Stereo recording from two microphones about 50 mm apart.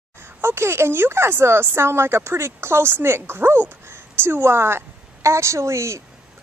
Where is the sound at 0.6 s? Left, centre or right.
Right.